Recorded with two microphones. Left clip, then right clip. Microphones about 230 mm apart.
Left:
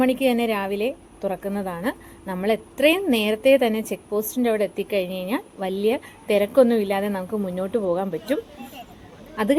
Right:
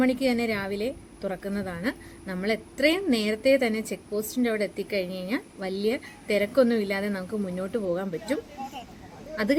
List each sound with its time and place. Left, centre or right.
0.0 s a woman's voice: centre